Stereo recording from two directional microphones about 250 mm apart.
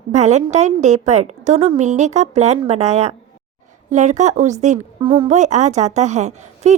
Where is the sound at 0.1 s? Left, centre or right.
Right.